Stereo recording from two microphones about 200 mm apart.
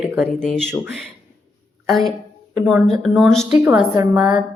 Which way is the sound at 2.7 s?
Centre (ahead or behind).